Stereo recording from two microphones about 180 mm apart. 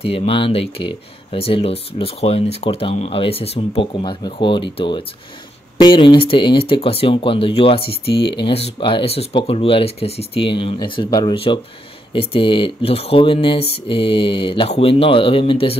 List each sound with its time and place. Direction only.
0.0 s speech: 30° left (ahead or behind)